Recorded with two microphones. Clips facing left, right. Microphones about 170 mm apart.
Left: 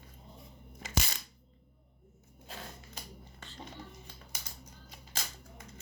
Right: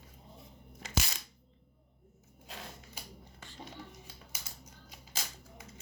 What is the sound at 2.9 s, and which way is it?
Finger snapping, 10° right (ahead or behind).